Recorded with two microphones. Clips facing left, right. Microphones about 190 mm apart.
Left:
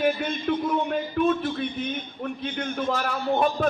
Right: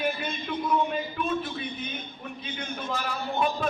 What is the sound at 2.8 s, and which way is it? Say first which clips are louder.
Speech: left 6 dB; 60° left (ahead or behind).